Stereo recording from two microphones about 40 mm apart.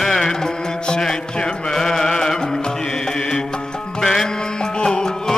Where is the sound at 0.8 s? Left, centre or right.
Centre.